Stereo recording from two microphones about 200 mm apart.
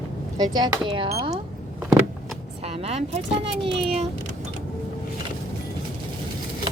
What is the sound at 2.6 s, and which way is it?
Speech, 30° right (ahead or behind).